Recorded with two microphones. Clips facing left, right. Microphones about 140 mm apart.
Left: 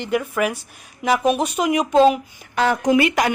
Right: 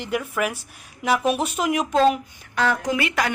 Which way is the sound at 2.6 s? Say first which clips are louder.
Left 6 dB; 20° left (ahead or behind).